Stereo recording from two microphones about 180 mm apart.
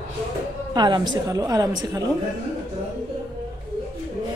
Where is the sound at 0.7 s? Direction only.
25° right (ahead or behind).